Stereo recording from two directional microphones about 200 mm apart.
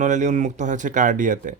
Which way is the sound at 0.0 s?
40° right (ahead or behind).